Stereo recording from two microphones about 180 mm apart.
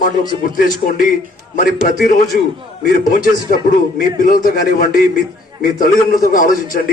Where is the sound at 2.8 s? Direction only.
50° left (ahead or behind).